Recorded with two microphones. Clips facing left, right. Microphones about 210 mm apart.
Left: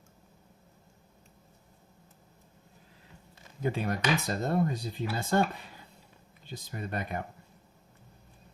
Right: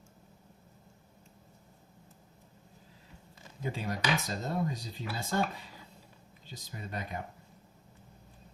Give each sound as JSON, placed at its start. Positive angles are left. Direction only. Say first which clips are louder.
{"t": 3.6, "sound": "speech", "louder": "left 5 dB", "side_deg": 60}
{"t": 6.4, "sound": "speech", "louder": "left 6 dB", "side_deg": 60}